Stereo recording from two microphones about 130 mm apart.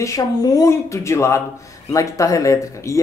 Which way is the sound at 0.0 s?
25° left (ahead or behind).